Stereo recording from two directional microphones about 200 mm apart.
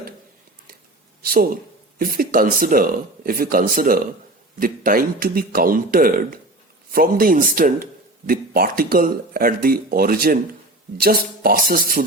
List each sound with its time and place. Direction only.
1.2 s speech: 45° right (ahead or behind)